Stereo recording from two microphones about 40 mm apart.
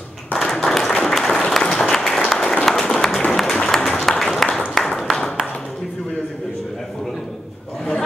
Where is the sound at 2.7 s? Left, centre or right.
Centre.